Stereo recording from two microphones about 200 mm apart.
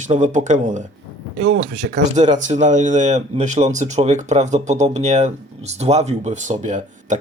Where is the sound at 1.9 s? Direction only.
40° right (ahead or behind).